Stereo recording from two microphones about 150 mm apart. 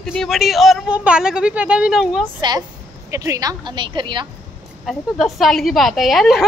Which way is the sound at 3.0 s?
20° right (ahead or behind).